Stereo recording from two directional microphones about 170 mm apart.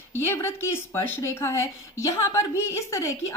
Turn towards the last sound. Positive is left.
turn(degrees=15)  # may be behind; listen again after turning